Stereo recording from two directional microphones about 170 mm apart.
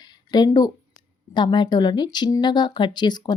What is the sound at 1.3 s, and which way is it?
Speech, 25° left (ahead or behind).